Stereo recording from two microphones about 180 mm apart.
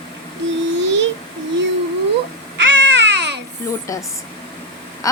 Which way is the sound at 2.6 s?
90° right.